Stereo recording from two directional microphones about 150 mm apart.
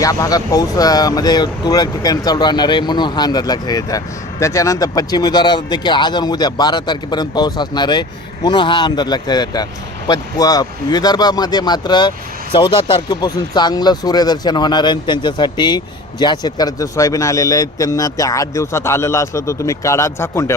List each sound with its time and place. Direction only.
0.0 s speech: 25° left (ahead or behind)